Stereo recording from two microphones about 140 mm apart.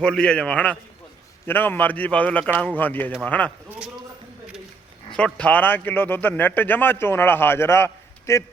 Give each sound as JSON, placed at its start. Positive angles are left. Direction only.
{"t": 0.0, "sound": "a man's voice", "side_deg": 5}
{"t": 3.7, "sound": "a man's voice", "side_deg": -5}
{"t": 5.1, "sound": "a man's voice", "side_deg": 10}